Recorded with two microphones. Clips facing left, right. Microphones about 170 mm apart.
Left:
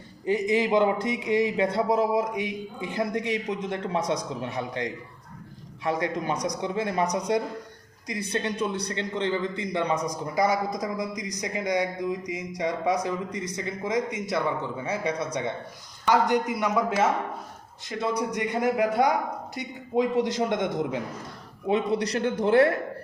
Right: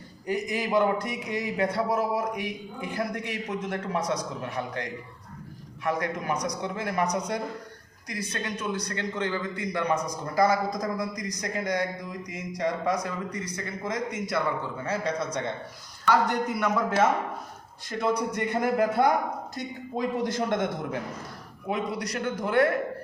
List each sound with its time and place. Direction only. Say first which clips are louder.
0.3 s a man's voice: left 5 dB; 20° left (ahead or behind)
18.2 s a man's voice: left 1 dB; 15° left (ahead or behind)
21.7 s a man's voice: left 5 dB; 25° left (ahead or behind)